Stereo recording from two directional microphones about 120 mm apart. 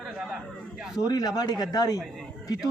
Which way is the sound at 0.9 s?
30° left (ahead or behind).